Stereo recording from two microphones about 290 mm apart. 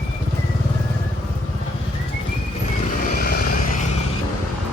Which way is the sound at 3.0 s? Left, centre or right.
Left.